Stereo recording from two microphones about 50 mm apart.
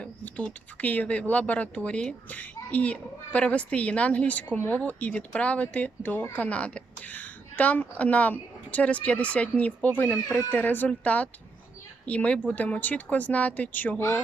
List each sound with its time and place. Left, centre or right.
0.0 s a woman's voice: left
2.3 s a woman's voice: left